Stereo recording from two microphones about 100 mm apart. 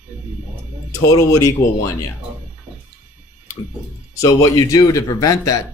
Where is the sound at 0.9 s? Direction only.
30° left (ahead or behind).